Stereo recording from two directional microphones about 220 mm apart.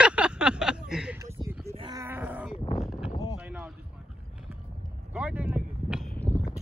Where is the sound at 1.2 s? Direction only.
15° right (ahead or behind).